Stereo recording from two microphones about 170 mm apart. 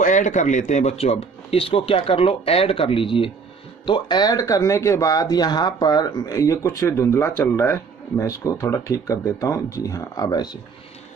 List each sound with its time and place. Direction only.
0.0 s speech: 45° left (ahead or behind); by 10.6 s 25° left (ahead or behind)